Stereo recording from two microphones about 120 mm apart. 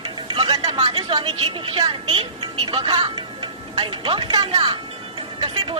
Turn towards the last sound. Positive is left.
turn(degrees=-40)  # may be behind; listen again after turning